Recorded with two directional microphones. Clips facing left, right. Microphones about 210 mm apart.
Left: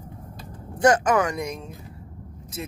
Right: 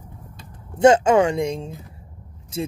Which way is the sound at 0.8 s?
25° right (ahead or behind).